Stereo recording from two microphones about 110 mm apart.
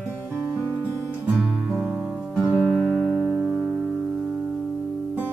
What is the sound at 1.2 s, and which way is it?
Music, 10° right (ahead or behind).